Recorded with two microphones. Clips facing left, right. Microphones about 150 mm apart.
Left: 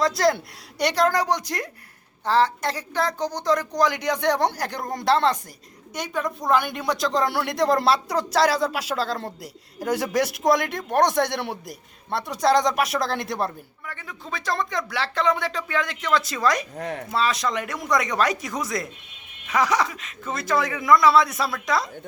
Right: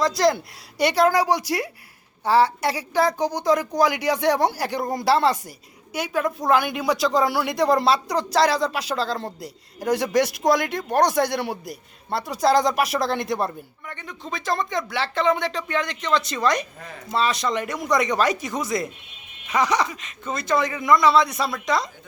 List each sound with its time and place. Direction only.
0.0 s a woman's voice: centre (ahead or behind)
16.7 s speech: 65° left (ahead or behind)
17.1 s speech: centre (ahead or behind)